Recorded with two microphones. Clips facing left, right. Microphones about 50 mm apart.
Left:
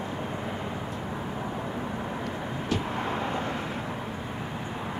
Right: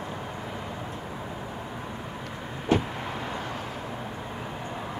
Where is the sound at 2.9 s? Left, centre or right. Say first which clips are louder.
Left 4 dB; left.